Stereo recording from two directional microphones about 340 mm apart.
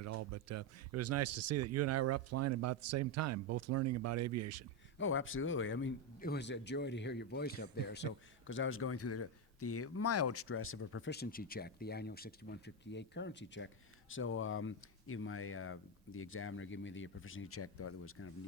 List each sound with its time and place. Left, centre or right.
0.0 s speech: right
4.9 s a man's voice: left